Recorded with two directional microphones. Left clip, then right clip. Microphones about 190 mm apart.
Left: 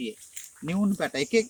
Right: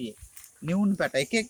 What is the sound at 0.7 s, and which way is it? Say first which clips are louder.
Speech: right 2 dB; 65° right (ahead or behind).